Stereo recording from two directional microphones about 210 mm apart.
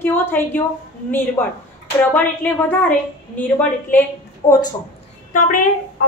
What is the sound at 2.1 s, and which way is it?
A woman's voice, 5° left (ahead or behind).